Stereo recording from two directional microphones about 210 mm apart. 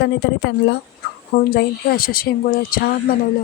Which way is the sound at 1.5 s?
45° left (ahead or behind).